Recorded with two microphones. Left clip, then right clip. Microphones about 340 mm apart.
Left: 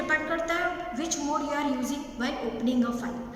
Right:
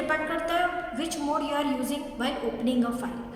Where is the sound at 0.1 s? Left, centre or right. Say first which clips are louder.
Left 1 dB; centre.